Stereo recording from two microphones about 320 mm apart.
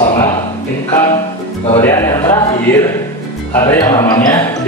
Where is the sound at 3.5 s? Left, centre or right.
Centre.